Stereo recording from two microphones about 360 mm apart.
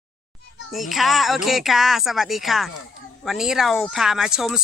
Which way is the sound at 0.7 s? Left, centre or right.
Centre.